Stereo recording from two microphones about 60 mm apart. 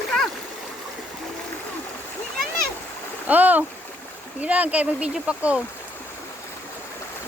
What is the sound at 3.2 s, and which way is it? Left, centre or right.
Speech, right.